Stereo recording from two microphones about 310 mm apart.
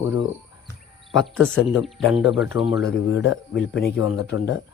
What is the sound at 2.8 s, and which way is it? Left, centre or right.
Speech, left.